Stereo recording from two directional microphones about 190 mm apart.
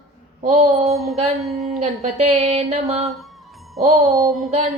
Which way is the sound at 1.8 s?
35° right (ahead or behind).